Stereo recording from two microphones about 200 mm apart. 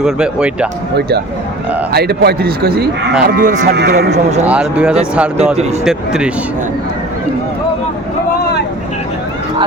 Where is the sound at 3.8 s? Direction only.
55° right (ahead or behind).